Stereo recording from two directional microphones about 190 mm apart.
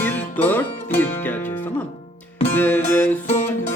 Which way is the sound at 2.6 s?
10° left (ahead or behind).